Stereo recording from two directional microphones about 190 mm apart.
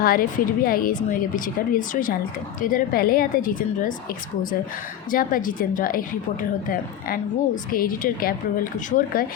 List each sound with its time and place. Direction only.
0.0 s speech: 50° left (ahead or behind)
5.1 s speech: 45° left (ahead or behind)
7.7 s speech: 50° left (ahead or behind)